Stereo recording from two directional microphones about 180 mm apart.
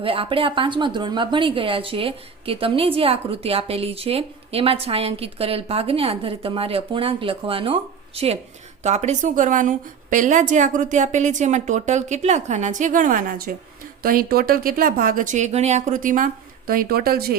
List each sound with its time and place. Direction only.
0.0 s a woman's voice: 30° right (ahead or behind); by 17.3 s 55° right (ahead or behind)